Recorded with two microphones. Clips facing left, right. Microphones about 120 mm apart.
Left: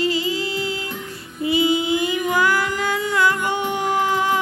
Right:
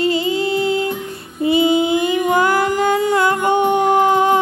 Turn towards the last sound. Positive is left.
turn(degrees=-25)  # may be behind; listen again after turning